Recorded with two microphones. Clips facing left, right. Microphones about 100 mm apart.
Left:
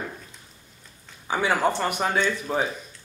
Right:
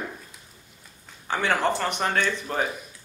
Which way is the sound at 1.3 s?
10° left (ahead or behind).